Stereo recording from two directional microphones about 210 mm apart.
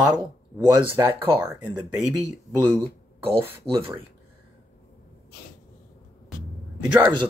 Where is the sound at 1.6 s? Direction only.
5° right (ahead or behind).